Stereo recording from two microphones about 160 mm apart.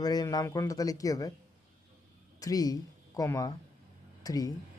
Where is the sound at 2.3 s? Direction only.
25° left (ahead or behind).